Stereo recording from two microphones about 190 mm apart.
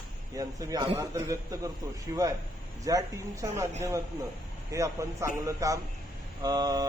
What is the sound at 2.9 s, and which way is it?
Speech, 15° right (ahead or behind).